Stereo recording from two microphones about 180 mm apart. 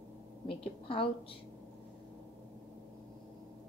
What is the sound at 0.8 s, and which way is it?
Speech, 30° left (ahead or behind).